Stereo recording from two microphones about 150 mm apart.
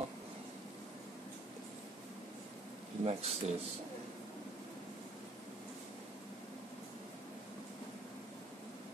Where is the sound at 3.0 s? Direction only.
45° right (ahead or behind).